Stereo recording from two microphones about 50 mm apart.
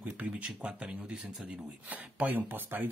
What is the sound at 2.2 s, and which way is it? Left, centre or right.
Speech, right.